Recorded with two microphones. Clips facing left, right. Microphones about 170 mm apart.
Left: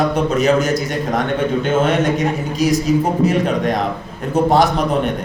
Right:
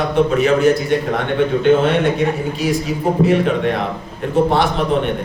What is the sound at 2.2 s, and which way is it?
A man's voice, 40° left (ahead or behind).